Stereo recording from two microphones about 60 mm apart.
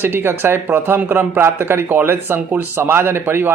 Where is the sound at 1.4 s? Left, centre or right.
Right.